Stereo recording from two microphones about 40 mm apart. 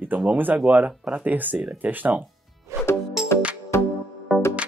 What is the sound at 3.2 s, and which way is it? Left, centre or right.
Music, centre.